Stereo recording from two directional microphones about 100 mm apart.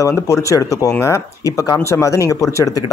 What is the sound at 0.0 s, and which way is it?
A man's voice, 30° left (ahead or behind).